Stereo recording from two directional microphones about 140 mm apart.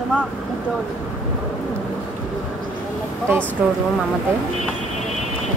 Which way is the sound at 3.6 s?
10° right (ahead or behind).